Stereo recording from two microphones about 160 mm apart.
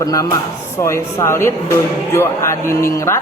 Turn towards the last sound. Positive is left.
turn(degrees=15)  # may be behind; listen again after turning